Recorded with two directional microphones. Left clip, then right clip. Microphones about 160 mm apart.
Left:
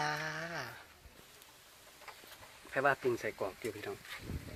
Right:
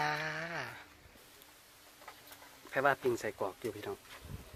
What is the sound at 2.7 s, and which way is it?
Speech, 5° right (ahead or behind).